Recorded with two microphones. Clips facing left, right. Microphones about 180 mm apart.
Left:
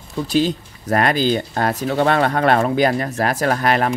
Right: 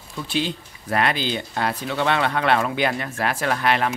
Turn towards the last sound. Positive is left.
turn(degrees=45)  # may be behind; listen again after turning